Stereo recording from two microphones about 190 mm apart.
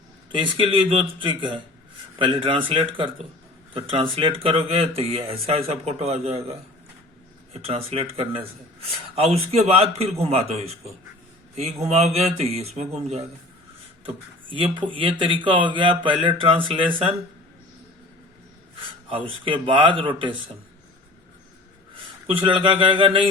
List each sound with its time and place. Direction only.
0.3 s speech: 25° right (ahead or behind)
19.0 s speech: 30° right (ahead or behind)
22.5 s speech: 25° right (ahead or behind)